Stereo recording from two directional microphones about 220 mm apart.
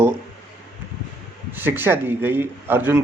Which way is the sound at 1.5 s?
10° right (ahead or behind).